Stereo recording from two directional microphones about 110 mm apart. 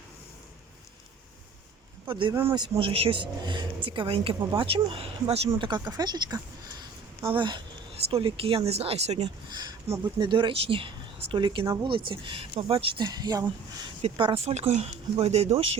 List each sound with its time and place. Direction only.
2.0 s speech: 50° right (ahead or behind)
2.3 s speech: 20° right (ahead or behind)
2.6 s speech: 50° right (ahead or behind)
5.5 s speech: 45° right (ahead or behind); by 9.3 s 70° right (ahead or behind)
10.0 s speech: 45° right (ahead or behind)
13.1 s speech: 35° right (ahead or behind)
14.0 s speech: 55° right (ahead or behind)